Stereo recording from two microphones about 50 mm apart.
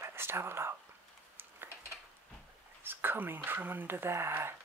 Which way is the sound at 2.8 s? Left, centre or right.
Right.